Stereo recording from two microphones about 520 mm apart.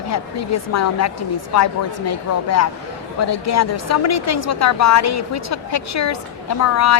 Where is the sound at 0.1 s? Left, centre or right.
Left.